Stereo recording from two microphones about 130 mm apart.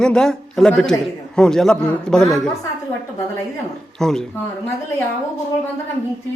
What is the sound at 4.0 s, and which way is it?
Speech, 5° left (ahead or behind).